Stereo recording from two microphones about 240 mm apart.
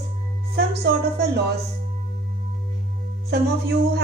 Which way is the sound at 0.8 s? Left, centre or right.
Right.